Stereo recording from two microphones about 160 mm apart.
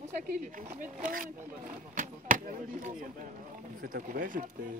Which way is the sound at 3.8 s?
60° right (ahead or behind).